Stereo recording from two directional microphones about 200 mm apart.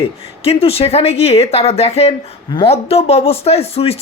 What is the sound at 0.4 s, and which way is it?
Speech, 30° left (ahead or behind).